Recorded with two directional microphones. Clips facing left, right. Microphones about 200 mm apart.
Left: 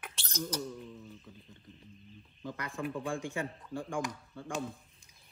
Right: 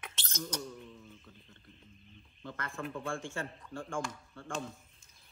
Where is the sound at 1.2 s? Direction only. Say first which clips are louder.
Left 4 dB; 15° left (ahead or behind).